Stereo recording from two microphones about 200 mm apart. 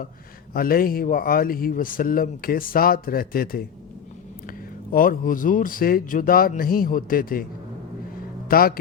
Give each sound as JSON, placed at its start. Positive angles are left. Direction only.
{"t": 0.5, "sound": "speech", "side_deg": 45}
{"t": 8.4, "sound": "speech", "side_deg": 45}